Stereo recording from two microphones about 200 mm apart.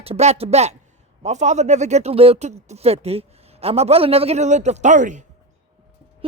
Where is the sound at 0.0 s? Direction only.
30° right (ahead or behind).